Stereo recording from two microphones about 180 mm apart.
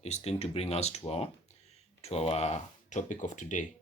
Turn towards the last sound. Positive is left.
turn(degrees=45)  # may be behind; listen again after turning